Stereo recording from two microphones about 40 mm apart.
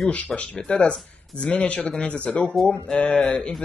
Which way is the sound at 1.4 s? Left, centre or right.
Left.